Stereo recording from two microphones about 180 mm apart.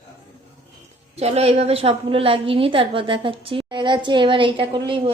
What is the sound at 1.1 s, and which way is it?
A woman's voice, 35° right (ahead or behind).